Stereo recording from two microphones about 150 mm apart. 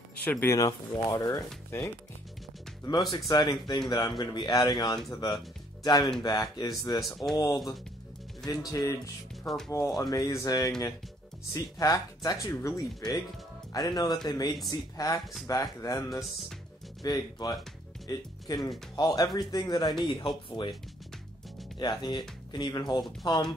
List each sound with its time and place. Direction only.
0.2 s speech: 10° left (ahead or behind)
16.1 s speech: centre (ahead or behind)
17.0 s speech: 25° left (ahead or behind)
21.7 s speech: 30° left (ahead or behind)